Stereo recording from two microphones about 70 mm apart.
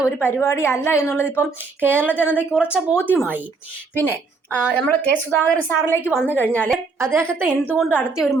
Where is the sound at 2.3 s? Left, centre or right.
Centre.